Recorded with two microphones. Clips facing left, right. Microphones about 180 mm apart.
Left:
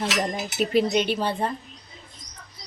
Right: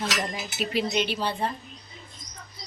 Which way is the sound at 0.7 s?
50° left (ahead or behind).